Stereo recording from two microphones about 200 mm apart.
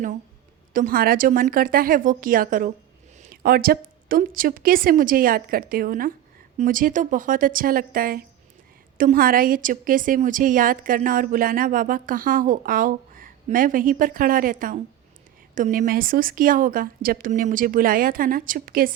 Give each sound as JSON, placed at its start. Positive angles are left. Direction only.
{"t": 0.7, "sound": "a woman's voice", "side_deg": -45}